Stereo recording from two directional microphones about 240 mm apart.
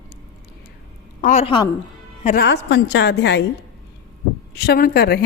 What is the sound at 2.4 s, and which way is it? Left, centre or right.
A woman's voice, left.